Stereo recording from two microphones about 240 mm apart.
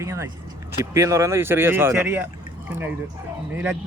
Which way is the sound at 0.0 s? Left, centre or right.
Centre.